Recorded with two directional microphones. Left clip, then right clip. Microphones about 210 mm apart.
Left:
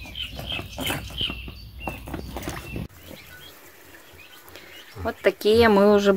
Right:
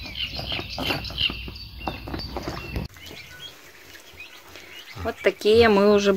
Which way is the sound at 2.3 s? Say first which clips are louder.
Even; 15° left (ahead or behind).